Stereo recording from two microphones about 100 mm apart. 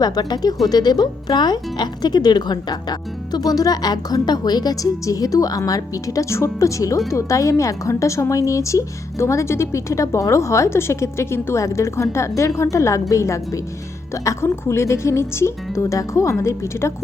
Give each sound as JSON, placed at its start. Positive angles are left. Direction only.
{"t": 0.0, "sound": "speech", "side_deg": 40}